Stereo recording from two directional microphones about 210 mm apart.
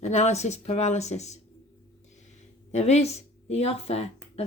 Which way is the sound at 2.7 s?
30° left (ahead or behind).